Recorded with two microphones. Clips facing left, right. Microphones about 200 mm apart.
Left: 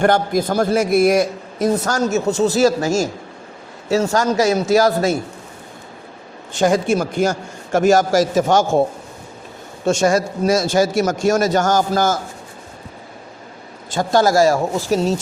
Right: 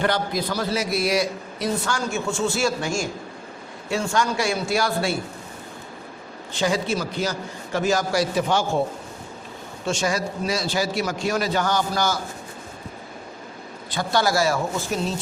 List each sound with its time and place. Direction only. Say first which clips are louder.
0.0 s a man's voice: left 7 dB; 50° left (ahead or behind)
6.5 s a man's voice: left 7 dB; 50° left (ahead or behind)
9.8 s a man's voice: left 8 dB; 45° left (ahead or behind)
13.9 s a man's voice: left 7 dB; 45° left (ahead or behind)